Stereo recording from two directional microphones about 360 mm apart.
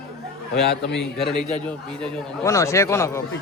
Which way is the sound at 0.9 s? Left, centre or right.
Centre.